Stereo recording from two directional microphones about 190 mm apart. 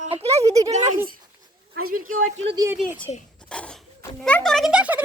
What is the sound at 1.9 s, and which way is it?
Speech, 45° right (ahead or behind).